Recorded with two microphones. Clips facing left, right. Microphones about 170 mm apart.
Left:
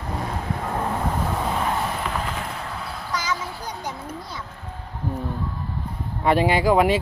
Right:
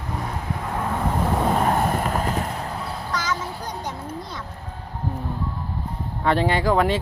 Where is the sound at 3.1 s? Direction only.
10° left (ahead or behind).